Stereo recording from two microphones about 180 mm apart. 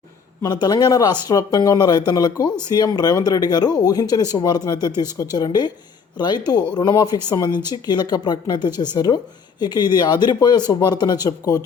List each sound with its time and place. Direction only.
0.4 s speech: 20° left (ahead or behind)